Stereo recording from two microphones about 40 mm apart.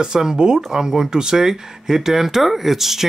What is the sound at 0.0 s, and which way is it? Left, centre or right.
Speech, centre.